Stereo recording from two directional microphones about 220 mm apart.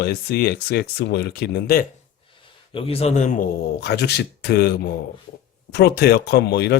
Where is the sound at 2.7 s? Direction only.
25° left (ahead or behind).